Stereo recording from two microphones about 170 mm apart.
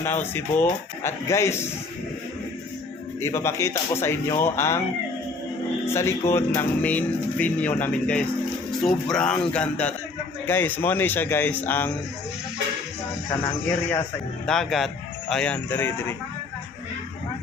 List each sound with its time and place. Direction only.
0.0 s speech: 15° left (ahead or behind)
3.2 s speech: 15° left (ahead or behind)
5.8 s speech: 15° left (ahead or behind)
14.4 s speech: 5° left (ahead or behind)